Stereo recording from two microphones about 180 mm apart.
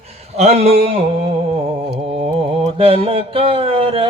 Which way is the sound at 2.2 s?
30° right (ahead or behind).